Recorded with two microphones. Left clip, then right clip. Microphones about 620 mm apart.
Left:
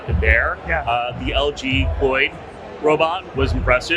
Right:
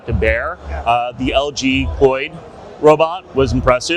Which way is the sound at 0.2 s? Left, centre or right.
Right.